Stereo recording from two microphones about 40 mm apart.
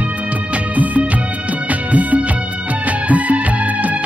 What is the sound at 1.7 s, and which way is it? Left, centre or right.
Music, right.